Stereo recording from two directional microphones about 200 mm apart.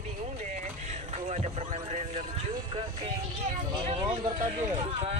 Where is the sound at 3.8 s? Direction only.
30° right (ahead or behind).